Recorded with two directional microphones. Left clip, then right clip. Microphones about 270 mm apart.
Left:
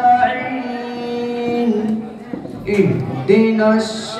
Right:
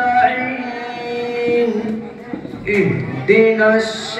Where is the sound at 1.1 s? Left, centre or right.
Left.